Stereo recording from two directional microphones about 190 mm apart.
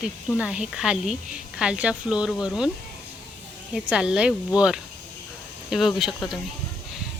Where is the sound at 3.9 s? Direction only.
5° right (ahead or behind).